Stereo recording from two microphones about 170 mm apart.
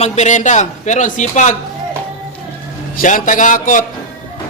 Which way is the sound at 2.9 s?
50° left (ahead or behind).